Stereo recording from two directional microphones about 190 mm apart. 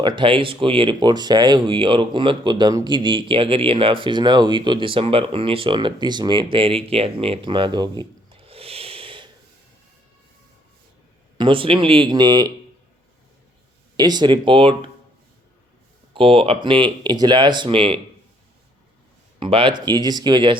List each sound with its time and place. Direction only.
0.0 s speech: 25° right (ahead or behind)
11.3 s speech: 25° right (ahead or behind)
13.9 s speech: 20° right (ahead or behind)
16.1 s speech: 30° right (ahead or behind)
19.4 s speech: 25° right (ahead or behind)